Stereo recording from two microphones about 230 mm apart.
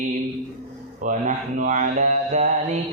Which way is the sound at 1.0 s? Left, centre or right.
Right.